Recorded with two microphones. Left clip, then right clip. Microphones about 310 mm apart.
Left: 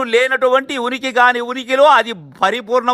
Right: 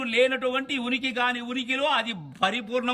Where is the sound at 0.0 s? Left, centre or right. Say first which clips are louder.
Left 9 dB; centre.